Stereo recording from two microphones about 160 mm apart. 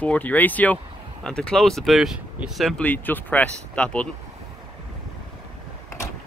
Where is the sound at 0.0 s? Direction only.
10° left (ahead or behind).